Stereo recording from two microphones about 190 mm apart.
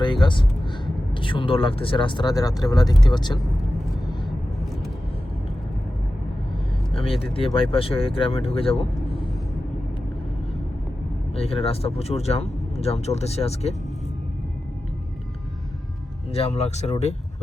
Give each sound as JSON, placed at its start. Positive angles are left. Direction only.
{"t": 0.0, "sound": "a sound", "side_deg": 25}
{"t": 1.1, "sound": "speech", "side_deg": 25}
{"t": 7.3, "sound": "speech", "side_deg": 30}
{"t": 11.3, "sound": "speech", "side_deg": 30}
{"t": 16.3, "sound": "speech", "side_deg": 35}